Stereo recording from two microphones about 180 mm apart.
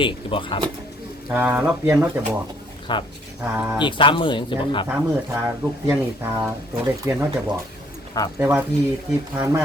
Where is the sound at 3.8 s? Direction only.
25° left (ahead or behind).